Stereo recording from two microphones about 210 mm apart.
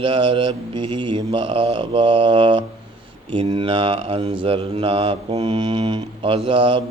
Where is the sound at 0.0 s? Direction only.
25° right (ahead or behind).